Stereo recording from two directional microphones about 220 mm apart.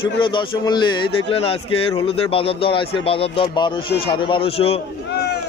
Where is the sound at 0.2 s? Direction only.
20° left (ahead or behind).